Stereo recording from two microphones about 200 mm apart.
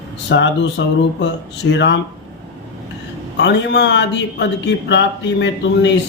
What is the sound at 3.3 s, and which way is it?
Speech, 60° left (ahead or behind).